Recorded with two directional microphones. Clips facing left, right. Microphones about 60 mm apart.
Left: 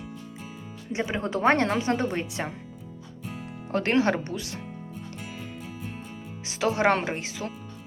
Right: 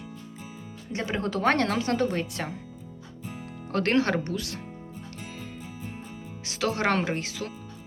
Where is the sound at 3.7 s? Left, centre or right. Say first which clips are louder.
Left 1 dB; centre.